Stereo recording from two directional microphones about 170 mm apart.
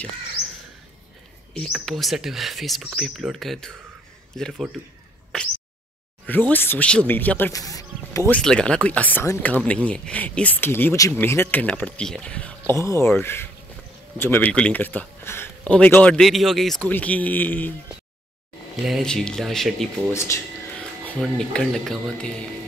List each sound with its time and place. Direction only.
1.6 s speech: centre (ahead or behind)
6.2 s speech: 10° left (ahead or behind)
8.3 s speech: 5° left (ahead or behind)
18.8 s speech: centre (ahead or behind)
20.1 s speech: 15° left (ahead or behind)